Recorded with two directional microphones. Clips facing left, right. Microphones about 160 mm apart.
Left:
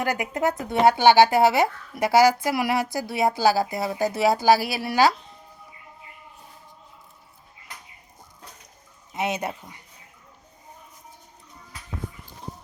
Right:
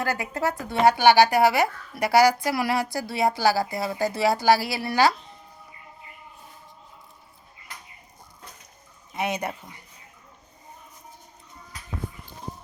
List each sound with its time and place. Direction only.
0.0 s speech: 15° left (ahead or behind)
9.1 s speech: 20° left (ahead or behind)